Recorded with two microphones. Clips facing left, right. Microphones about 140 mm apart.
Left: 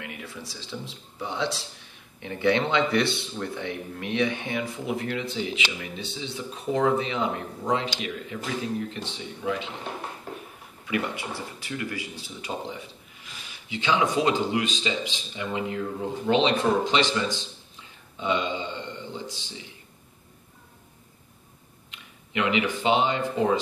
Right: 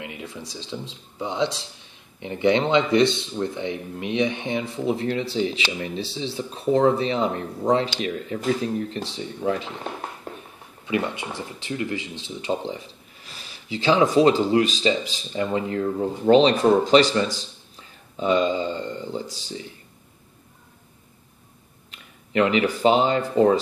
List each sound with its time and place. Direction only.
0.0 s speech: 20° right (ahead or behind); by 9.7 s 40° right (ahead or behind)
10.9 s speech: 20° right (ahead or behind); by 19.6 s 40° right (ahead or behind)
21.9 s speech: 40° right (ahead or behind)